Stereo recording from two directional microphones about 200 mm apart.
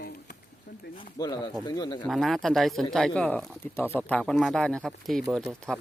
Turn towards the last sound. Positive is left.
turn(degrees=0)  # may be behind; listen again after turning